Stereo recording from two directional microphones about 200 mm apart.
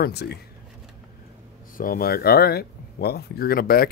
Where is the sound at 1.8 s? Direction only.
45° left (ahead or behind).